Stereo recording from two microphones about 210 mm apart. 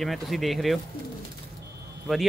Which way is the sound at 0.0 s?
Centre (ahead or behind).